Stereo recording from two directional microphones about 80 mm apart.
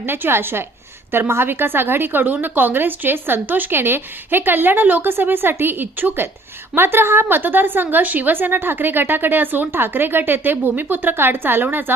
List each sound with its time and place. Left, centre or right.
0.0 s a woman's voice: right